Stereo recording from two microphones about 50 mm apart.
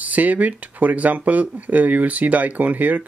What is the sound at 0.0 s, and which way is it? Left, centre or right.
Speech, right.